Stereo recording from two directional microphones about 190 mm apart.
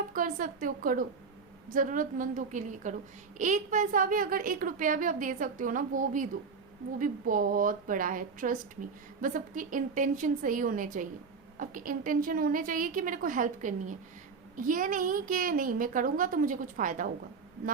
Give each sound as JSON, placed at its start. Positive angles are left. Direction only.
{"t": 0.1, "sound": "a child's voice", "side_deg": -45}